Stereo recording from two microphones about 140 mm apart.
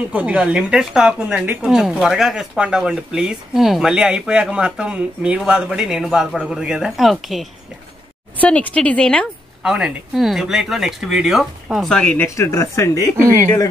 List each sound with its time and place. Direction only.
0.1 s a woman's voice: 10° right (ahead or behind)
8.4 s a woman's voice: 10° left (ahead or behind)
9.6 s a woman's voice: 5° right (ahead or behind)
12.4 s speech: 20° left (ahead or behind)